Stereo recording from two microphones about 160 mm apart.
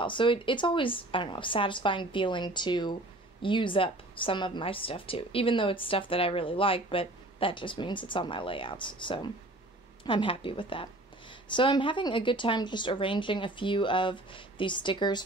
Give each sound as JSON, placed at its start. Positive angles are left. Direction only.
{"t": 0.0, "sound": "speech", "side_deg": 30}